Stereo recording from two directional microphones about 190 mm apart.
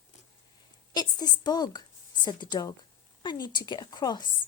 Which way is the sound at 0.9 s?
20° left (ahead or behind).